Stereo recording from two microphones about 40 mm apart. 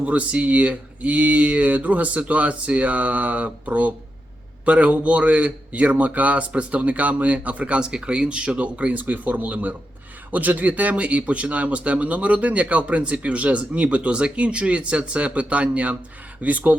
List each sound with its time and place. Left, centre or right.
0.0 s speech: right